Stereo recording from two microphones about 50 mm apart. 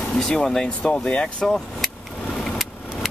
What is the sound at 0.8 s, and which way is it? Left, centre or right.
Speech, left.